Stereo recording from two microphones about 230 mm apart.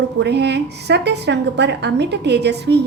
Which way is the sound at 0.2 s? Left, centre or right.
Right.